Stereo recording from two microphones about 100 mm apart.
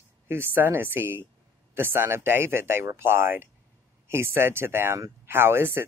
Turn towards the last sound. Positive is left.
turn(degrees=-25)  # may be behind; listen again after turning